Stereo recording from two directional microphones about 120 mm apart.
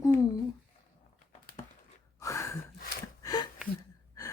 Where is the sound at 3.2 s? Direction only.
35° left (ahead or behind).